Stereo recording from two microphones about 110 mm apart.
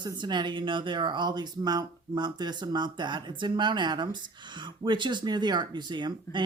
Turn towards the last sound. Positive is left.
turn(degrees=-45)  # may be behind; listen again after turning